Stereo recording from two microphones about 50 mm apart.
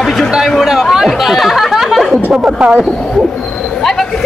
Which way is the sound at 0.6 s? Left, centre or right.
Centre.